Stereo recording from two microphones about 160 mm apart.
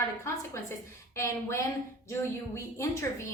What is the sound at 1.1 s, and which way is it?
Speech, 20° left (ahead or behind).